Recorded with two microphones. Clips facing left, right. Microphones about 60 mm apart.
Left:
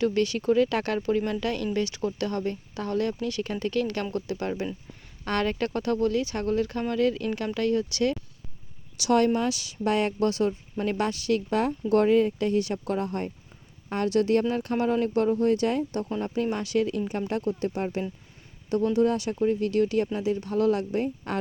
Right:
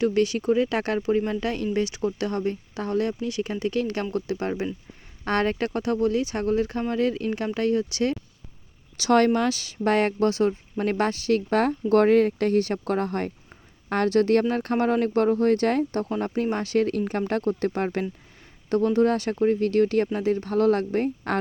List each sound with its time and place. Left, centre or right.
0.0 s speech: right
9.0 s speech: right
16.2 s speech: right